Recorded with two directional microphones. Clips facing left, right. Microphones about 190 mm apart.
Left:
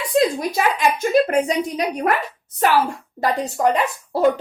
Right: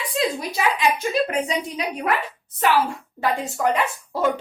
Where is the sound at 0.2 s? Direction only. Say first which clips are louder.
Left 5 dB; 45° left (ahead or behind).